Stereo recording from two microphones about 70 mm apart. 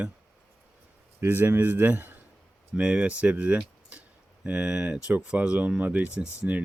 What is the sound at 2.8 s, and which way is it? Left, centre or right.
Speech, centre.